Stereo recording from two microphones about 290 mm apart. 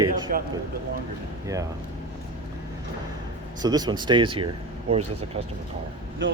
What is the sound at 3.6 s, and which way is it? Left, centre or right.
Speech, centre.